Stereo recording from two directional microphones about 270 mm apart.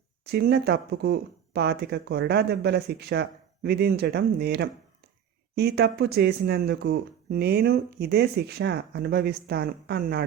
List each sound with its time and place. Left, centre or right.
0.3 s speech: right